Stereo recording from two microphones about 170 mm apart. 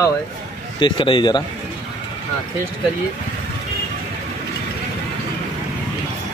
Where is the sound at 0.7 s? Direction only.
30° left (ahead or behind).